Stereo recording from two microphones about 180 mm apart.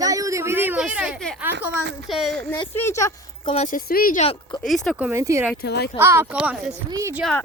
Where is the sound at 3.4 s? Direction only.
40° left (ahead or behind).